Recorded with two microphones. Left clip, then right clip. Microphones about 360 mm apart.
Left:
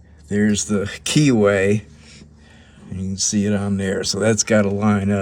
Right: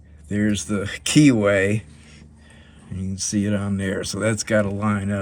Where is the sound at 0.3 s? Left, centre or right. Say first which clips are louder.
Left 4 dB; centre.